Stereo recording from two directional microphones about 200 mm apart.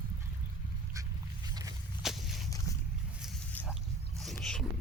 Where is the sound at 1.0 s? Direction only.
15° right (ahead or behind).